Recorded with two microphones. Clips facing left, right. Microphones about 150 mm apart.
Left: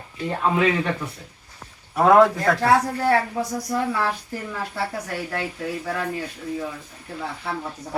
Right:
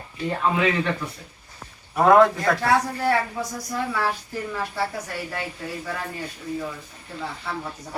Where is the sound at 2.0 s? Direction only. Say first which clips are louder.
Left 1 dB; 5° left (ahead or behind).